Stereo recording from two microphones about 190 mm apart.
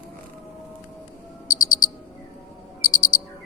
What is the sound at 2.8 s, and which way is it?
Bird, 90° left.